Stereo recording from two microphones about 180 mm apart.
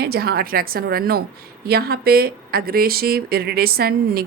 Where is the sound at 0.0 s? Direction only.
60° right (ahead or behind).